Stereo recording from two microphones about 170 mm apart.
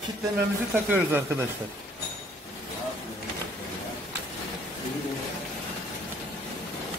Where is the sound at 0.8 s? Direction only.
10° right (ahead or behind).